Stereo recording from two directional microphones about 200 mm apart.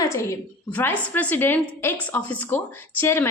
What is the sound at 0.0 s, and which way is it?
A woman's voice, 15° left (ahead or behind).